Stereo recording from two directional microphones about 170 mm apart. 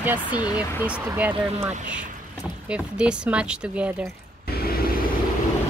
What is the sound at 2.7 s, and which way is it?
Speech, 5° right (ahead or behind).